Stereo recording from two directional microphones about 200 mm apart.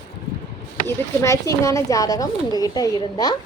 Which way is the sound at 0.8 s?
15° left (ahead or behind).